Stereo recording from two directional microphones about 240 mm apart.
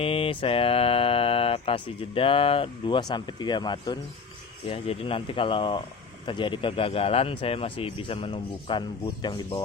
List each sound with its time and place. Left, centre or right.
0.0 s speech: left